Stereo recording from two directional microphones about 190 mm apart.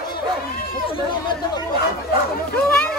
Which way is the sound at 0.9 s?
25° left (ahead or behind).